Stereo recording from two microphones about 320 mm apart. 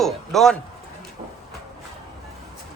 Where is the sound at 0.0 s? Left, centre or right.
Centre.